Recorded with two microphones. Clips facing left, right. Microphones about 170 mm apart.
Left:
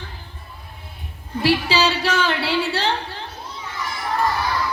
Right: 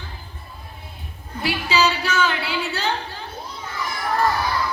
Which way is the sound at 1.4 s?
30° left (ahead or behind).